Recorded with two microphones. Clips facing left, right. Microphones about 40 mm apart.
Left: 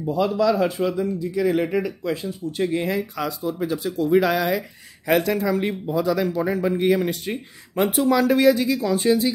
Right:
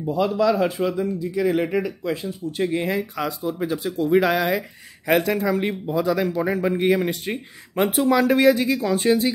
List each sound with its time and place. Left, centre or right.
0.0 s speech: centre; by 9.3 s right